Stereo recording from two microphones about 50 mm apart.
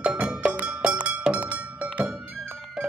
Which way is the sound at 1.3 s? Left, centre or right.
Right.